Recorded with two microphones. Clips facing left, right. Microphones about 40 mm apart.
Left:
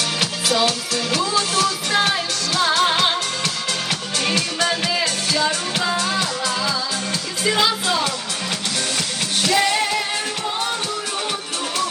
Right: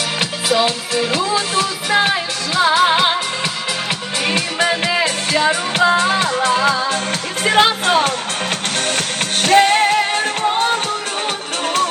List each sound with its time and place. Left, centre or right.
0.2 s music: right
4.2 s music: right
7.4 s speech: right
9.0 s music: right